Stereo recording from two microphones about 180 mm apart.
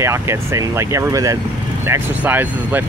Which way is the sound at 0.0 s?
15° right (ahead or behind).